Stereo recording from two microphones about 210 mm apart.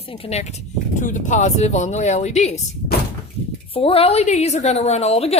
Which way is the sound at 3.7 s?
25° left (ahead or behind).